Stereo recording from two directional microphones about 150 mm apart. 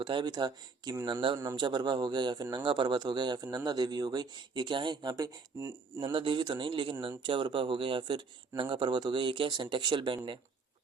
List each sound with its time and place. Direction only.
0.0 s a man's voice: 30° right (ahead or behind)
6.1 s speech: 35° right (ahead or behind)